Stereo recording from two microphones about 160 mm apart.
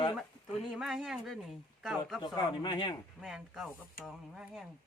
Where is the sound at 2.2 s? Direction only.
30° left (ahead or behind).